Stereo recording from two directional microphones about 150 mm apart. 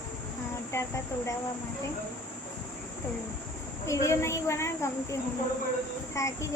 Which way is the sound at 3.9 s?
20° left (ahead or behind).